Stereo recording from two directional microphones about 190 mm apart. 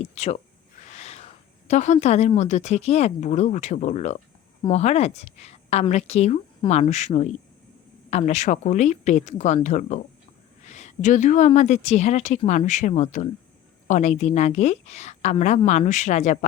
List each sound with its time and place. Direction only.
0.0 s a woman's voice: 35° left (ahead or behind)